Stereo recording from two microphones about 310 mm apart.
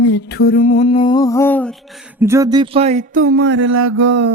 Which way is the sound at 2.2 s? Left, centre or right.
Centre.